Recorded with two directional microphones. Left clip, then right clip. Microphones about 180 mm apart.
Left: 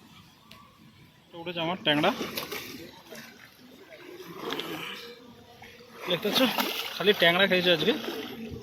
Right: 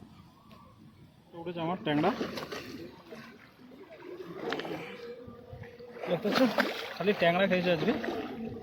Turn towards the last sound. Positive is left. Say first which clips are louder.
# left 5 dB
turn(degrees=0)  # may be behind; listen again after turning